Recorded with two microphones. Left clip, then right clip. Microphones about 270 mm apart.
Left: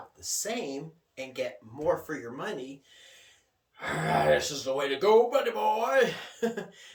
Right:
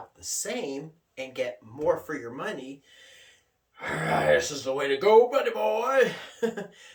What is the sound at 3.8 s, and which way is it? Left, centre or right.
Speech, centre.